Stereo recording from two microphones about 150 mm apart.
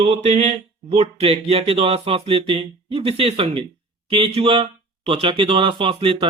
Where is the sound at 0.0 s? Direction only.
50° right (ahead or behind).